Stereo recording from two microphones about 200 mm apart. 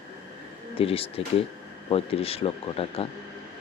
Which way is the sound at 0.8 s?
30° left (ahead or behind).